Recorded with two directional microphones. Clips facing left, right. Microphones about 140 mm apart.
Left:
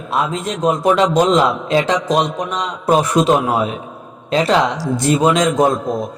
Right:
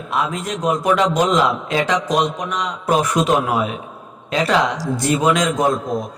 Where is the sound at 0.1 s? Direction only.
25° left (ahead or behind).